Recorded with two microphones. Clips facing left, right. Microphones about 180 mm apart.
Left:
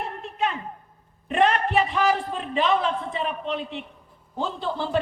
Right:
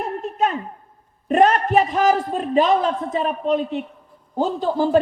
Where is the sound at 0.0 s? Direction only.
40° right (ahead or behind).